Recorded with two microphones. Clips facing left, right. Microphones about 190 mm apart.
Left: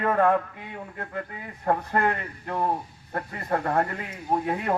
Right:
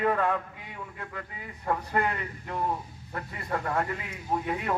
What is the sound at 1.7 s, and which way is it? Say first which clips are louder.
A man's voice: left 4 dB; 50° left (ahead or behind).